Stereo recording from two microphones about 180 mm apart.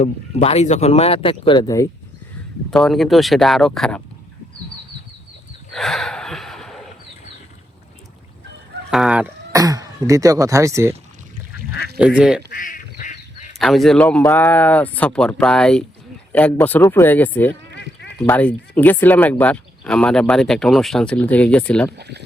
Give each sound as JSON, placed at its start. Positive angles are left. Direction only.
{"t": 0.0, "sound": "speech", "side_deg": 35}
{"t": 2.6, "sound": "speech", "side_deg": 5}
{"t": 5.7, "sound": "gasp", "side_deg": 0}
{"t": 8.9, "sound": "speech", "side_deg": -5}
{"t": 9.5, "sound": "speech", "side_deg": -20}
{"t": 11.9, "sound": "speech", "side_deg": -5}
{"t": 12.5, "sound": "goose", "side_deg": 50}
{"t": 13.6, "sound": "speech", "side_deg": 0}
{"t": 21.9, "sound": "speech", "side_deg": -70}